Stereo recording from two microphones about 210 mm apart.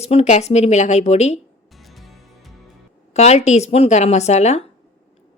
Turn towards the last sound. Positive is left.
turn(degrees=30)  # may be behind; listen again after turning